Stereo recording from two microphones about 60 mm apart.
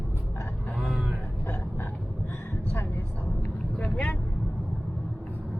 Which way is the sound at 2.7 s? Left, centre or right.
Left.